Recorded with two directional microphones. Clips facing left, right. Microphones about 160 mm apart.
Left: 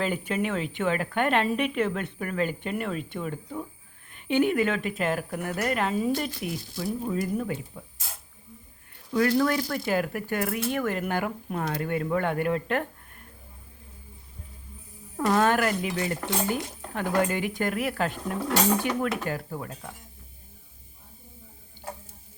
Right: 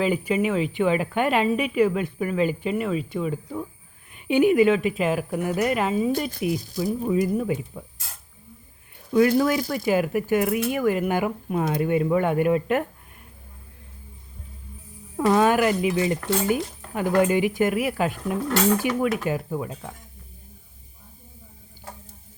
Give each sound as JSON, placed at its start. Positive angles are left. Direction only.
{"t": 0.0, "sound": "speech", "side_deg": -5}
{"t": 9.4, "sound": "speech", "side_deg": -15}
{"t": 15.2, "sound": "speech", "side_deg": -10}